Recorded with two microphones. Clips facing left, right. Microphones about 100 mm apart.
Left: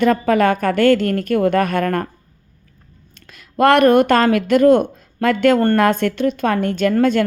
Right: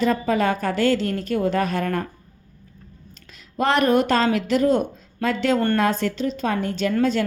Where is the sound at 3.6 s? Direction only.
65° left (ahead or behind).